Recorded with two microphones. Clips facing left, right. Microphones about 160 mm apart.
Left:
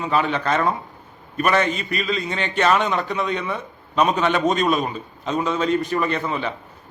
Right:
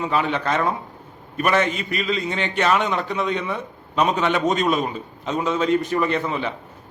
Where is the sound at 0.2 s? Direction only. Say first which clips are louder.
Left 2 dB; 10° right (ahead or behind).